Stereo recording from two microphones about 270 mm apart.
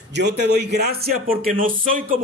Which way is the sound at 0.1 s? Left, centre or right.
Right.